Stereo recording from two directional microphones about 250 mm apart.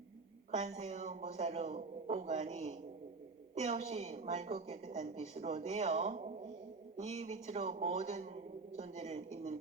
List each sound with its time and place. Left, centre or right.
0.5 s a woman's voice: right